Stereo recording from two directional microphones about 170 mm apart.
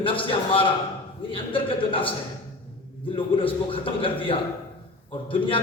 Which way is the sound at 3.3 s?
30° left (ahead or behind).